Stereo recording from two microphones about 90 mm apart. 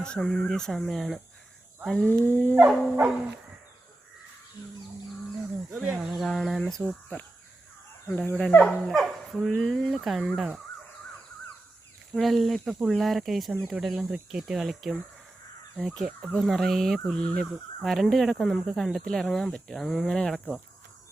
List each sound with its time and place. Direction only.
0.0 s speech: 5° left (ahead or behind)
2.2 s speech: 25° left (ahead or behind)
2.6 s dog: 10° right (ahead or behind)
5.4 s speech: 5° right (ahead or behind)
6.8 s speech: 20° left (ahead or behind); by 10.6 s centre (ahead or behind)
12.1 s speech: centre (ahead or behind)